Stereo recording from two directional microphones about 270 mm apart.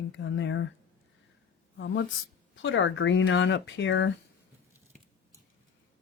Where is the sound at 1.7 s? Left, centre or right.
Left.